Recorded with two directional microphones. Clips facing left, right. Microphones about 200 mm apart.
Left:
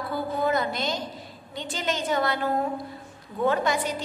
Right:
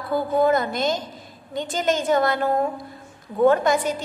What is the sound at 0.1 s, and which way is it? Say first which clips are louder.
A woman's voice: right 7 dB; 50° right (ahead or behind).